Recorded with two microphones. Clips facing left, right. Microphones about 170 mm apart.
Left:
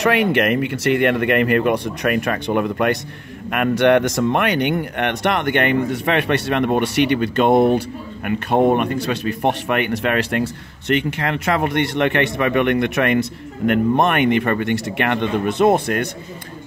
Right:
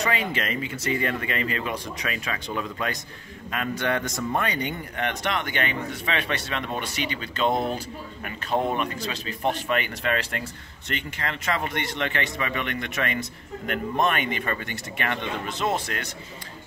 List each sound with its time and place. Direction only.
0.0 s speech: 70° left (ahead or behind)